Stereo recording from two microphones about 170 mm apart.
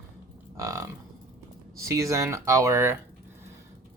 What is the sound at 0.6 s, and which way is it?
Livestock, 20° right (ahead or behind).